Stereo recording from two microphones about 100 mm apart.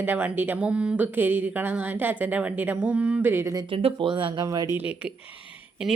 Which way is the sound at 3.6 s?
65° right (ahead or behind).